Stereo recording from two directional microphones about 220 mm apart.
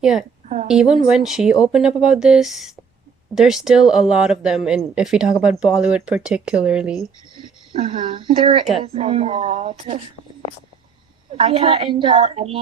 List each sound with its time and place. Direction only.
0.0 s speech: 5° right (ahead or behind)
0.4 s a sound: 35° right (ahead or behind)
0.7 s speech: centre (ahead or behind)
7.3 s speech: 20° right (ahead or behind)
11.3 s speech: 25° right (ahead or behind)